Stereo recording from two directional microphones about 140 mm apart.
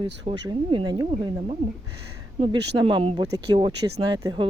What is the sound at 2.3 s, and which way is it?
Speech, 40° right (ahead or behind).